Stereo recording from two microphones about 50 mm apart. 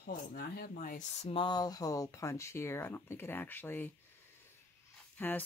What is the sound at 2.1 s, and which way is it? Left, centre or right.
Speech, left.